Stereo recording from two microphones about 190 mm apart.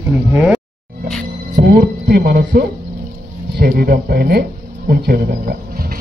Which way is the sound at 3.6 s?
55° right (ahead or behind).